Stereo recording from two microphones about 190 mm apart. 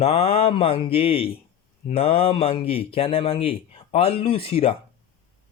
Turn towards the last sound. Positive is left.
turn(degrees=30)  # may be behind; listen again after turning